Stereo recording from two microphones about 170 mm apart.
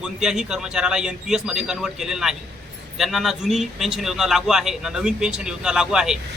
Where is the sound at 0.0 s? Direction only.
5° right (ahead or behind).